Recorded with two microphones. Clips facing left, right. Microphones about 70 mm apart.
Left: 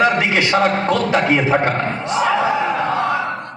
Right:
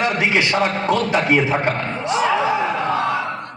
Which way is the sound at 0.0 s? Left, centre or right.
Left.